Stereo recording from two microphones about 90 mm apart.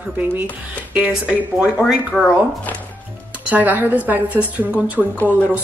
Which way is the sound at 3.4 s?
20° right (ahead or behind).